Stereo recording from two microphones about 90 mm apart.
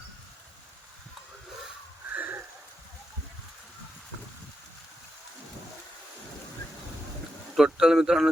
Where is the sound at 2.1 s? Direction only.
20° right (ahead or behind).